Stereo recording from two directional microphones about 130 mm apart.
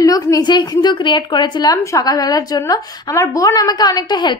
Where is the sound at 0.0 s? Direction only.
30° left (ahead or behind).